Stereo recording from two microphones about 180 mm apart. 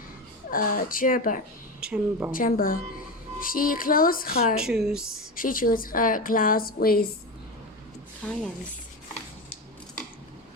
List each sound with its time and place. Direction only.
0.5 s a woman's voice: 50° left (ahead or behind)
1.8 s a woman's voice: 10° right (ahead or behind)
2.3 s a woman's voice: 50° left (ahead or behind)
4.6 s speech: 5° right (ahead or behind)
5.4 s a woman's voice: 50° left (ahead or behind)
8.2 s speech: 5° left (ahead or behind)